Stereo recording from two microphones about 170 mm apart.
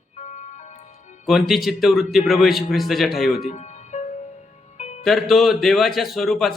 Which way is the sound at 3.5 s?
40° left (ahead or behind).